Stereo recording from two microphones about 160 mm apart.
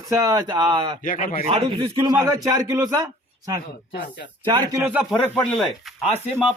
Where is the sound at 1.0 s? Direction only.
60° left (ahead or behind).